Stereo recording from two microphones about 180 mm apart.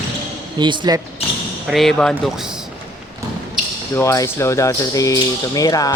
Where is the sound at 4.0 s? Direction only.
15° left (ahead or behind).